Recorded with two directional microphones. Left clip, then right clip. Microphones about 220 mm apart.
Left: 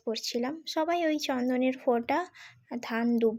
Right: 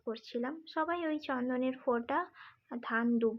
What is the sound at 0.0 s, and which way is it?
A woman's voice, 25° left (ahead or behind).